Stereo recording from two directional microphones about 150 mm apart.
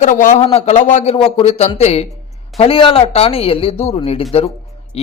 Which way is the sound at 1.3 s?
40° left (ahead or behind).